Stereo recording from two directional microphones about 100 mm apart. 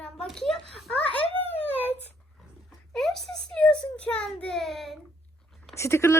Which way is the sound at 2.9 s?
5° left (ahead or behind).